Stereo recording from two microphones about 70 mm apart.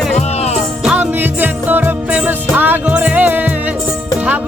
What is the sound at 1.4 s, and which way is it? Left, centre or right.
Music, right.